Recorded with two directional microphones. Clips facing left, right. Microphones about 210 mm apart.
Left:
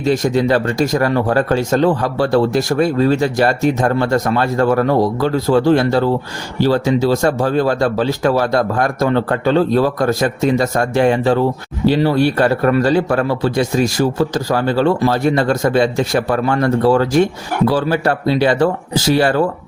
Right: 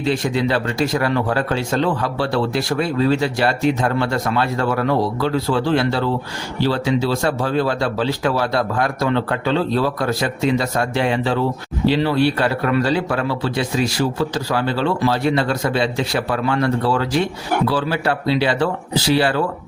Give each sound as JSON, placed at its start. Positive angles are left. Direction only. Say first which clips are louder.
{"t": 0.0, "sound": "speech", "louder": "left 4 dB", "side_deg": 45}